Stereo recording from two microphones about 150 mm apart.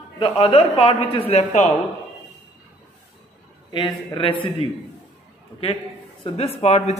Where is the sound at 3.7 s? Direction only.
30° left (ahead or behind).